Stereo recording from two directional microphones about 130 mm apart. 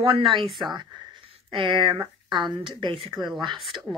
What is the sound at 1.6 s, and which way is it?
Speech, 40° right (ahead or behind).